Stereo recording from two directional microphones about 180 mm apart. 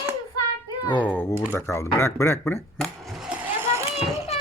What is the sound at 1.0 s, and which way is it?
Speech, 10° left (ahead or behind).